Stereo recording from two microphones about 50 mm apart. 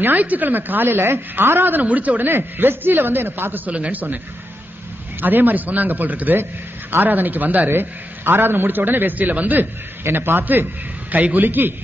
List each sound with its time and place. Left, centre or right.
0.0 s speech: right
3.7 s speech: right
5.2 s speech: right
10.0 s speech: right